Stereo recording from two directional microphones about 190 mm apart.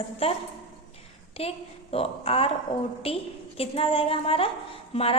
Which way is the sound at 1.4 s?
30° left (ahead or behind).